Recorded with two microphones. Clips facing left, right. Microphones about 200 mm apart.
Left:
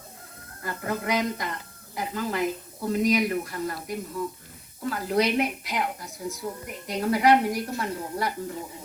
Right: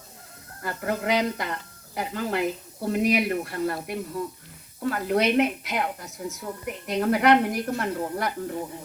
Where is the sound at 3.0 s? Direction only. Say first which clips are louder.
Even; 65° right (ahead or behind).